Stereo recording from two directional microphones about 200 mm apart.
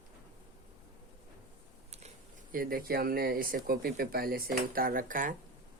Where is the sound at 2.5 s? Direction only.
45° right (ahead or behind).